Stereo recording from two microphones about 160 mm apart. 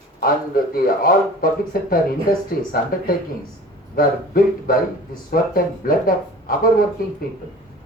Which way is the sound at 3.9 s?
65° left (ahead or behind).